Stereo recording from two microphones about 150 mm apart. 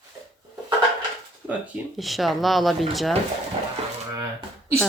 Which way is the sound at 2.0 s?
Centre (ahead or behind).